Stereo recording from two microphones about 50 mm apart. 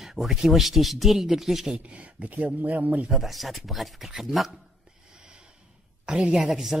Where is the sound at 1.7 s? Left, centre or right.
Right.